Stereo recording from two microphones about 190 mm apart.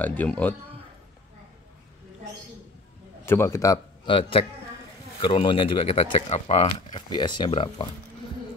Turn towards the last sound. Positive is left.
turn(degrees=25)  # may be behind; listen again after turning